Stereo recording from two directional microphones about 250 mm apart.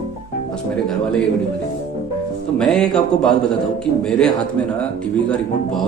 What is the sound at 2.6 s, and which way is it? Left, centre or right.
Speech, centre.